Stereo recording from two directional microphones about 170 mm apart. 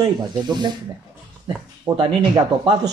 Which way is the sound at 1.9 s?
20° right (ahead or behind).